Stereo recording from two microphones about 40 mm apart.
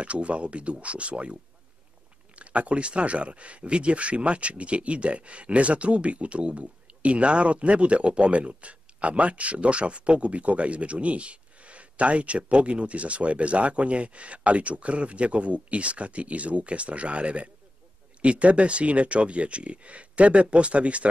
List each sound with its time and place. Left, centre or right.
0.0 s speech: right